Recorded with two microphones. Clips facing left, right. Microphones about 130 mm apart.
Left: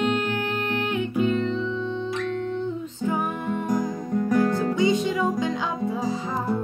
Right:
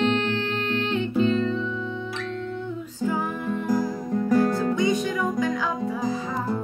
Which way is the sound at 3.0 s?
20° left (ahead or behind).